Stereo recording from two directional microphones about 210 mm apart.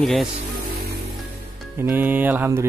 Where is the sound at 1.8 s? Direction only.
10° right (ahead or behind).